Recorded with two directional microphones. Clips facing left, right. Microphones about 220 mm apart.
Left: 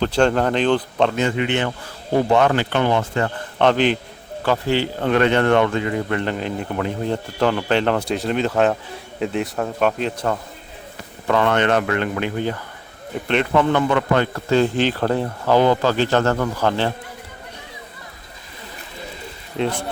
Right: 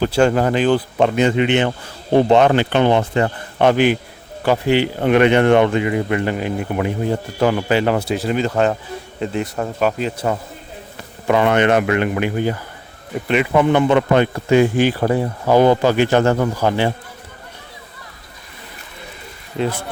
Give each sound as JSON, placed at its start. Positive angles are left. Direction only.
{"t": 0.0, "sound": "speech", "side_deg": -10}